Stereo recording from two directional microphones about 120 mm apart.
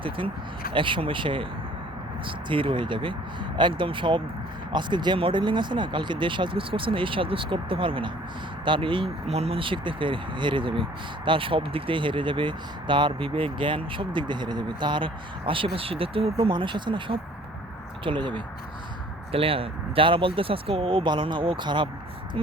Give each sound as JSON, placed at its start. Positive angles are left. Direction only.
{"t": 0.7, "sound": "speech", "side_deg": -45}